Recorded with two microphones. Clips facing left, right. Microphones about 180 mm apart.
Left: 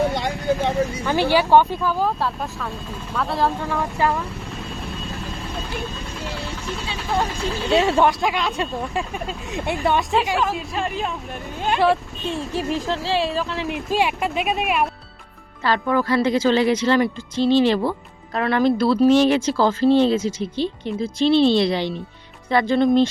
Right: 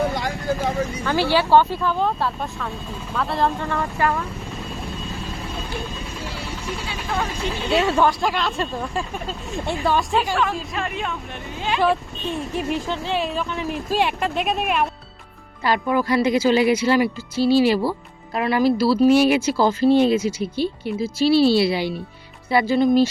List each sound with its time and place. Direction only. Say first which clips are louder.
0.1 s a sound: left 2 dB; 25° left (ahead or behind)
1.0 s speech: even; 15° left (ahead or behind)
1.8 s speech: even; 5° left (ahead or behind)
7.8 s speech: left 1 dB; 25° left (ahead or behind)
8.2 s speech: even; centre (ahead or behind)
12.4 s speech: even; 35° left (ahead or behind)
12.8 s speech: left 2 dB; centre (ahead or behind)
15.6 s speech: even; 15° right (ahead or behind)